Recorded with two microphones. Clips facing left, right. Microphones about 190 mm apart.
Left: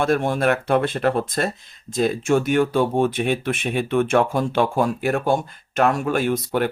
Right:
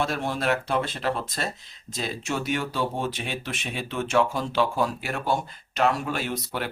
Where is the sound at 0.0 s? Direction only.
55° left (ahead or behind).